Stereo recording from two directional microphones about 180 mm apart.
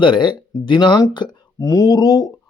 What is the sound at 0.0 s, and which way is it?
Speech, 25° left (ahead or behind).